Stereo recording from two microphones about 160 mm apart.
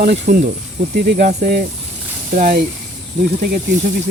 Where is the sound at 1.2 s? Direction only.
55° right (ahead or behind).